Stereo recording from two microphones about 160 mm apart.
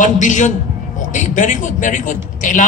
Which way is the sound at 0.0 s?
50° left (ahead or behind).